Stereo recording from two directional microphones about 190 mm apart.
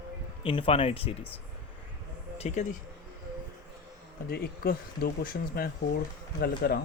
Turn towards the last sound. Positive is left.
turn(degrees=55)  # may be behind; listen again after turning